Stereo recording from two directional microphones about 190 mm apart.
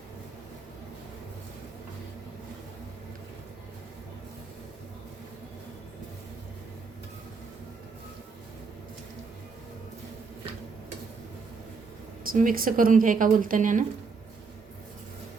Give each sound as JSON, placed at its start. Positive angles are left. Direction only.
{"t": 12.3, "sound": "speech", "side_deg": -45}